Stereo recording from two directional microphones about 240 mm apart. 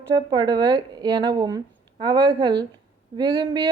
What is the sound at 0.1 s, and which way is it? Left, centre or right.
A woman's voice, centre.